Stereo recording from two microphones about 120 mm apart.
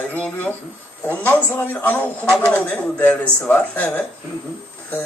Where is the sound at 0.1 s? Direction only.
15° left (ahead or behind).